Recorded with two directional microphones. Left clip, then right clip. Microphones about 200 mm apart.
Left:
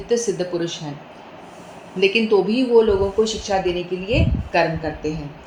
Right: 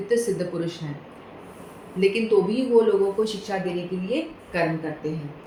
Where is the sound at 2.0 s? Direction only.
20° left (ahead or behind).